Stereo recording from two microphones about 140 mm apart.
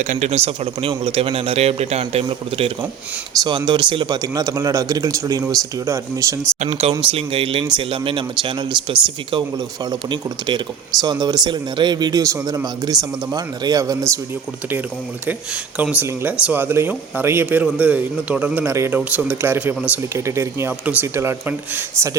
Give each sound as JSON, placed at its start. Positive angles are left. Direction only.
{"t": 0.0, "sound": "speech", "side_deg": -55}
{"t": 3.7, "sound": "a man's voice", "side_deg": -35}
{"t": 7.1, "sound": "a man's voice", "side_deg": -40}
{"t": 15.8, "sound": "speech", "side_deg": -10}